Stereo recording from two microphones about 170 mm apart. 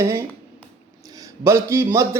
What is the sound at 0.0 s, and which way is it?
A man's voice, 15° right (ahead or behind).